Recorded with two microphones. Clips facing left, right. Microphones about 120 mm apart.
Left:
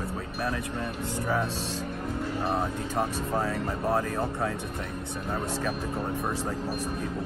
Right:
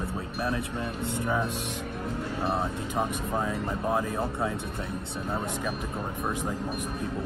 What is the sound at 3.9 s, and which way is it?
Speech, 20° right (ahead or behind).